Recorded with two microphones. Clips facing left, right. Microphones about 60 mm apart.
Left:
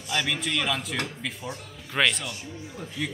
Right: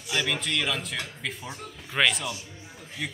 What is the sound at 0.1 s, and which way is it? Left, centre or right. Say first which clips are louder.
Speech: even; centre.